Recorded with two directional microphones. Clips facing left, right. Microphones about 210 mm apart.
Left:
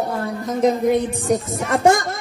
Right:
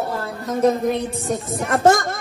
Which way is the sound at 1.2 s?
Centre (ahead or behind).